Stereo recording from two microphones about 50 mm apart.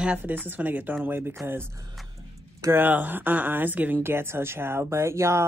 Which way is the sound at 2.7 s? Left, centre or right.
Right.